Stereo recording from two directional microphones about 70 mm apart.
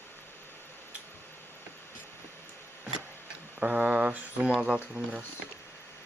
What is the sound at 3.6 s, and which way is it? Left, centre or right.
Speech, centre.